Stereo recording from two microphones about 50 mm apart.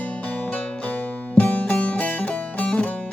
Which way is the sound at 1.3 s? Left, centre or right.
Left.